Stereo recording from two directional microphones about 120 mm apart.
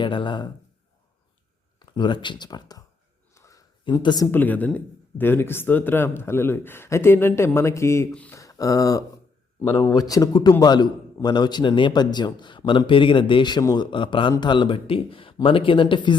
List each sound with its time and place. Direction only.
0.0 s a man's voice: 45° left (ahead or behind)
1.8 s a man's voice: 40° left (ahead or behind)
3.3 s a sound: 25° left (ahead or behind)
3.8 s a man's voice: 35° left (ahead or behind)
4.3 s a man's voice: 15° left (ahead or behind); by 13.8 s 35° left (ahead or behind)
13.9 s a man's voice: 45° left (ahead or behind)